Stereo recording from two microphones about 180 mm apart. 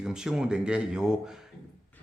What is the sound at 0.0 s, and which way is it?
Speech, 5° right (ahead or behind).